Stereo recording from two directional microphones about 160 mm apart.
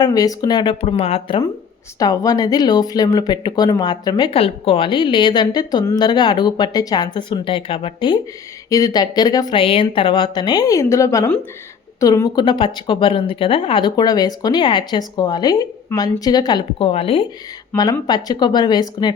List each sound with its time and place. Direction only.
0.0 s speech: 25° left (ahead or behind)
2.0 s speech: 25° left (ahead or behind)
18.0 s speech: 25° left (ahead or behind)